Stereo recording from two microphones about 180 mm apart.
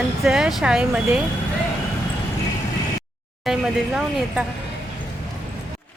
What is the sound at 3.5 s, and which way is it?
Speech, centre (ahead or behind).